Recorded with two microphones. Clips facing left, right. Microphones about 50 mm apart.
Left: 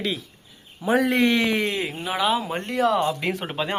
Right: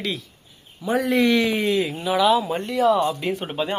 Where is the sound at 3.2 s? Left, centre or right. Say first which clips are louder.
Right 1 dB; left.